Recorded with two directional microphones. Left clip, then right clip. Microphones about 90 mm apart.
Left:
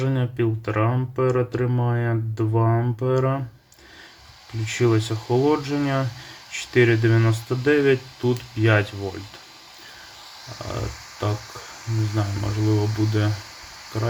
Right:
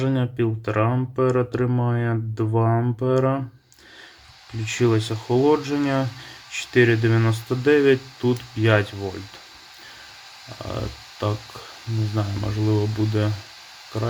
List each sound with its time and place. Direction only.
0.0 s speech: 25° right (ahead or behind)
4.5 s speech: 20° right (ahead or behind)
10.5 s speech: 25° right (ahead or behind)